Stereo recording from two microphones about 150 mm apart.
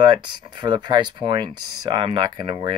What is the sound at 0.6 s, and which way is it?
Speech, 30° right (ahead or behind).